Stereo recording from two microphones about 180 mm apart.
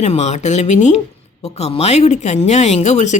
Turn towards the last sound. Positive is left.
turn(degrees=40)  # may be behind; listen again after turning